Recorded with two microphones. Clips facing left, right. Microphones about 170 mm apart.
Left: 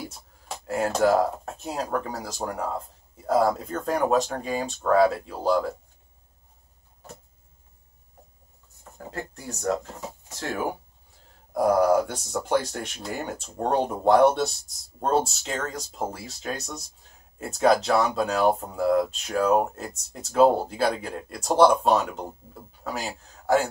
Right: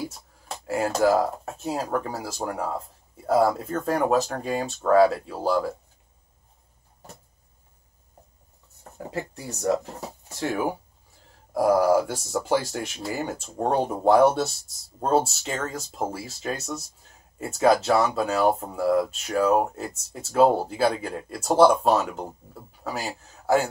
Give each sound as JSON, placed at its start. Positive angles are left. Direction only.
{"t": 0.0, "sound": "speech", "side_deg": 0}
{"t": 8.9, "sound": "speech", "side_deg": -15}